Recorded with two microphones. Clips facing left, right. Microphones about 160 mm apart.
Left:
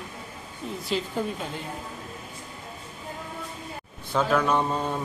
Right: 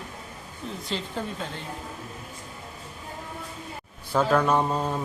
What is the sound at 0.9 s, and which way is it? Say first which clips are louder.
Speech: left 4 dB; 10° left (ahead or behind).